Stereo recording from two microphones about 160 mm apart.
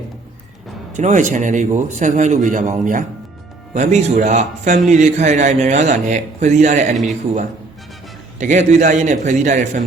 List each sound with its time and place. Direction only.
0.9 s speech: 50° right (ahead or behind)
8.4 s speech: 50° right (ahead or behind)